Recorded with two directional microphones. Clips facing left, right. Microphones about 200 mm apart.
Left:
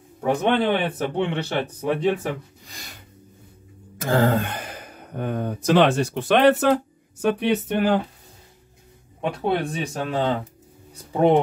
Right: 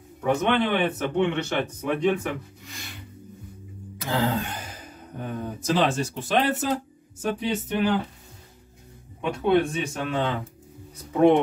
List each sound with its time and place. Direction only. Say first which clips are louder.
0.2 s speech: left 2 dB; 35° left (ahead or behind)
4.0 s speech: left 5 dB; 50° left (ahead or behind)
9.2 s speech: right 2 dB; 35° left (ahead or behind)